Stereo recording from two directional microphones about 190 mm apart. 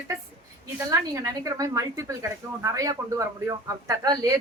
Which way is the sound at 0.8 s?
15° right (ahead or behind).